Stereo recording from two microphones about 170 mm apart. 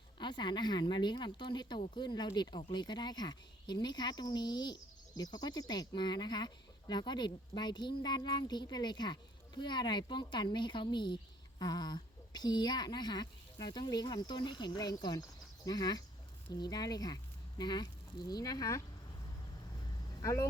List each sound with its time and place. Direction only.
0.2 s speech: 25° left (ahead or behind)
20.2 s speech: 20° left (ahead or behind)